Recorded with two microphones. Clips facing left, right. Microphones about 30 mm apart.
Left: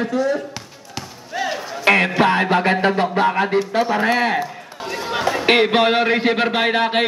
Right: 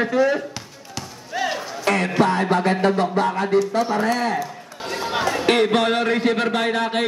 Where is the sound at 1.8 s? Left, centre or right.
Left.